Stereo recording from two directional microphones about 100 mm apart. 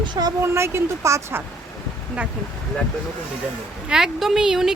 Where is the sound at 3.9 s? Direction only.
5° right (ahead or behind).